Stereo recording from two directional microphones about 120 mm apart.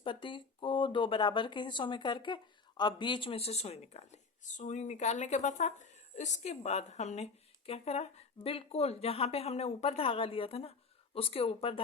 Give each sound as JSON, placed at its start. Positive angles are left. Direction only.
{"t": 0.0, "sound": "speech", "side_deg": 45}